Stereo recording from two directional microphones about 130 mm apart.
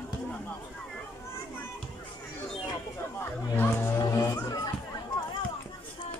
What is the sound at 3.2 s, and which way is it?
Music, 15° left (ahead or behind).